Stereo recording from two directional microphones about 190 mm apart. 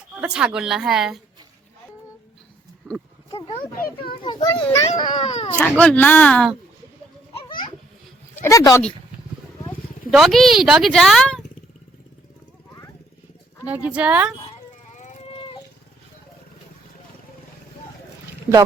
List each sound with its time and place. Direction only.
0.2 s speech: 5° right (ahead or behind)
2.8 s speech: 5° left (ahead or behind)
3.3 s a child's voice: 30° left (ahead or behind)
3.8 s a child's voice: 50° left (ahead or behind)
4.2 s a child's voice: 25° left (ahead or behind)
5.5 s speech: 5° left (ahead or behind)
7.4 s a sound: 25° left (ahead or behind)
8.4 s speech: 15° left (ahead or behind)
10.1 s speech: centre (ahead or behind)
13.7 s speech: 10° right (ahead or behind)
15.4 s howl: 25° left (ahead or behind)